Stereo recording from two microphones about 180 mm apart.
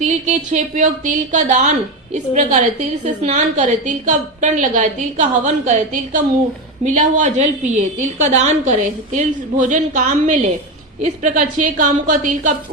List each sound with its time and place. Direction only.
0.0 s a woman's voice: 40° right (ahead or behind)